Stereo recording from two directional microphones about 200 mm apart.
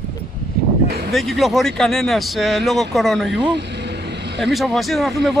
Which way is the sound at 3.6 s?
60° right (ahead or behind).